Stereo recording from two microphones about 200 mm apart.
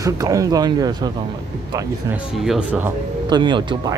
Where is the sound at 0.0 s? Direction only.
15° right (ahead or behind).